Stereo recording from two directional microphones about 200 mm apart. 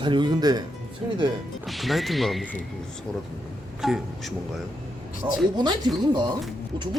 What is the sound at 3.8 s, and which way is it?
Speech, centre (ahead or behind).